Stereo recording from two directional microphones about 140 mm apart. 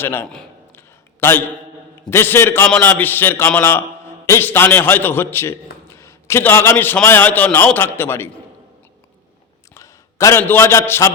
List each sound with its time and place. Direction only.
0.0 s a man's voice: 15° left (ahead or behind)
0.7 s a sound: 15° left (ahead or behind)
2.0 s a man's voice: 15° left (ahead or behind)
9.7 s a man's voice: 20° left (ahead or behind)